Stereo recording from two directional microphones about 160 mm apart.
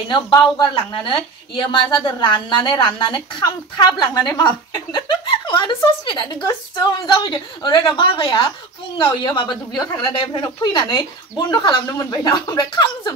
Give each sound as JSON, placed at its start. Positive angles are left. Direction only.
{"t": 0.1, "sound": "a woman's voice", "side_deg": 25}